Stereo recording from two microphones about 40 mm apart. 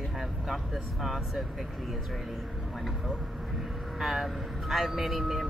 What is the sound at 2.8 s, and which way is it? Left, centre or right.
Speech, centre.